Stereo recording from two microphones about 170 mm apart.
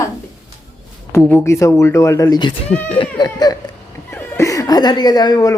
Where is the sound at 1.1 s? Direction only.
10° left (ahead or behind).